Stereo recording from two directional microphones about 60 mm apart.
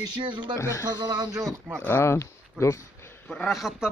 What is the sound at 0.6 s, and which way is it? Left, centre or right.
Speech, left.